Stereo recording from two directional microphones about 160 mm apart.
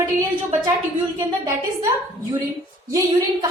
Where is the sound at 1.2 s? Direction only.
20° right (ahead or behind).